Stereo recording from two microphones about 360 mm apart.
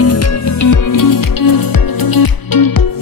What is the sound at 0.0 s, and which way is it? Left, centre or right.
Music, left.